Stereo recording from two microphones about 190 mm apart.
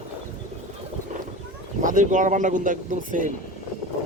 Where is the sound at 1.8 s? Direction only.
40° right (ahead or behind).